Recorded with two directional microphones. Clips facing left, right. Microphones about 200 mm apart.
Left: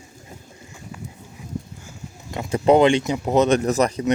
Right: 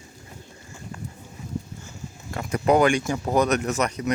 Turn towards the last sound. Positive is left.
turn(degrees=30)  # may be behind; listen again after turning